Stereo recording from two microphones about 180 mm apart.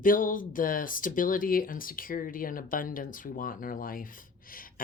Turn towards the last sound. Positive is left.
turn(degrees=50)  # may be behind; listen again after turning